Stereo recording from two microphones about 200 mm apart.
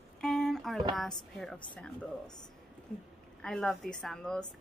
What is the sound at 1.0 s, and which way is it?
A woman's voice, centre (ahead or behind).